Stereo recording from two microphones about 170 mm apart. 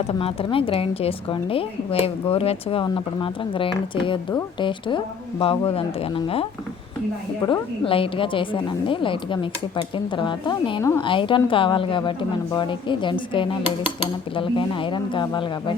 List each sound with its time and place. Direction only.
0.0 s a woman's voice: 35° left (ahead or behind)